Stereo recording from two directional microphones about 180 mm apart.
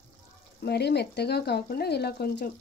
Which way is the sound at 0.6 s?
65° left (ahead or behind).